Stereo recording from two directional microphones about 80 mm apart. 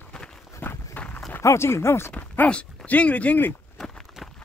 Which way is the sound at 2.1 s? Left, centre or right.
Centre.